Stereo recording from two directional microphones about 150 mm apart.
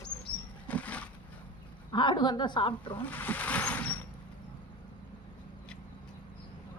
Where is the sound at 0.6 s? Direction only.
10° left (ahead or behind).